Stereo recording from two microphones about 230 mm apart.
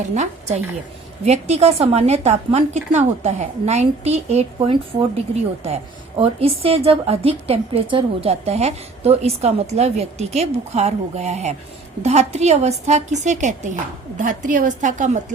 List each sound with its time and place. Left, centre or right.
0.1 s a woman's voice: right